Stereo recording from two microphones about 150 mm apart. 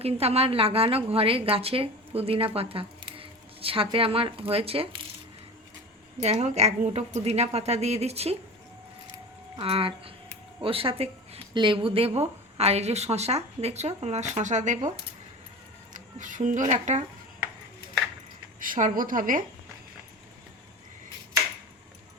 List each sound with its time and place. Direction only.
0.0 s a woman's voice: 40° right (ahead or behind)
6.2 s speech: 45° right (ahead or behind)
9.6 s a woman's voice: 40° right (ahead or behind)
18.6 s a woman's voice: 65° right (ahead or behind)